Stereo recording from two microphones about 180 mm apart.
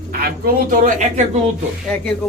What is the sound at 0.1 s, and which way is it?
A woman's voice, 55° right (ahead or behind).